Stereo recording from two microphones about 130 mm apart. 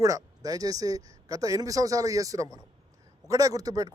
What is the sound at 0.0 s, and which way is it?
A man's voice, 25° right (ahead or behind).